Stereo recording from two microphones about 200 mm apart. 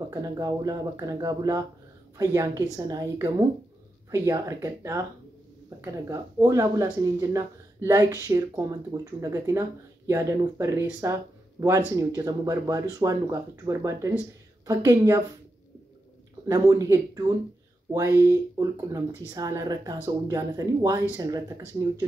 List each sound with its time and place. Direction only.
0.1 s speech: 15° right (ahead or behind)
16.4 s speech: 15° right (ahead or behind)